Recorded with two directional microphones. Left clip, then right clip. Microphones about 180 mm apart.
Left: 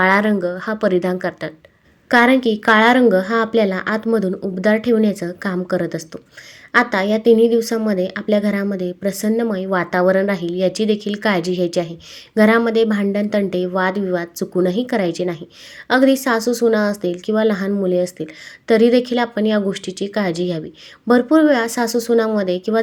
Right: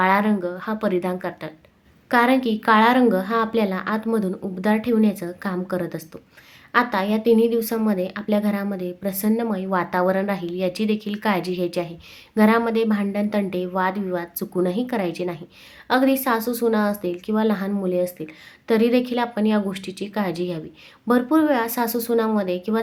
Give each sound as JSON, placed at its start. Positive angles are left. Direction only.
{"t": 0.0, "sound": "a woman's voice", "side_deg": 25}